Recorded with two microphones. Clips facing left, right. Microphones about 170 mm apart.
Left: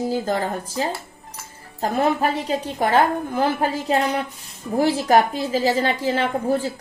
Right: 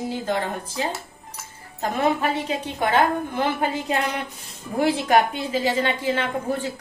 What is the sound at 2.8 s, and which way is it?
A woman's voice, 35° left (ahead or behind).